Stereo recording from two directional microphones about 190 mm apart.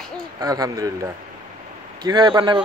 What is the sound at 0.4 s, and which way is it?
A woman's voice, 20° right (ahead or behind).